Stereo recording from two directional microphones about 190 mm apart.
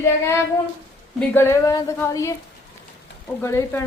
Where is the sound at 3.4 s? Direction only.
15° left (ahead or behind).